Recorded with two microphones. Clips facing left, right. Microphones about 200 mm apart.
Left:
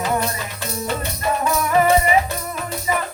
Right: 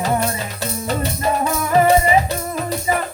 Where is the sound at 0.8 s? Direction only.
35° right (ahead or behind).